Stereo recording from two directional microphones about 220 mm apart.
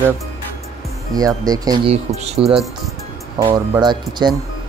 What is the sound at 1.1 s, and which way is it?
Speech, 15° right (ahead or behind).